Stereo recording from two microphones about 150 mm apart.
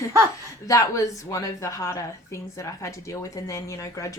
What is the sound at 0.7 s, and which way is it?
A woman's voice, 20° left (ahead or behind).